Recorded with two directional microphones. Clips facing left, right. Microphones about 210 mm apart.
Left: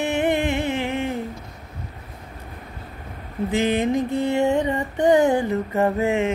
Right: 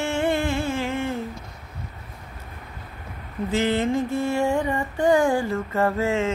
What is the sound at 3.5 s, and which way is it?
Music, 15° left (ahead or behind).